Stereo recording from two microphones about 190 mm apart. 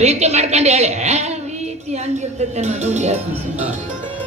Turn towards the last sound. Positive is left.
turn(degrees=-35)  # may be behind; listen again after turning